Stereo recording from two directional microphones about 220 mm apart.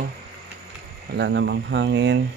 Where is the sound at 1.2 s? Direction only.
55° right (ahead or behind).